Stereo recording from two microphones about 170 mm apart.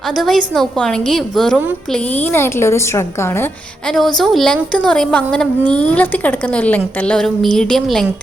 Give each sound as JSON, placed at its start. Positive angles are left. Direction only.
{"t": 0.2, "sound": "a woman's voice", "side_deg": 0}
{"t": 2.4, "sound": "a woman's voice", "side_deg": 15}
{"t": 3.9, "sound": "a woman's voice", "side_deg": 0}